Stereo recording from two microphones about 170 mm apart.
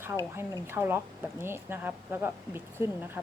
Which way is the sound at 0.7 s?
15° right (ahead or behind).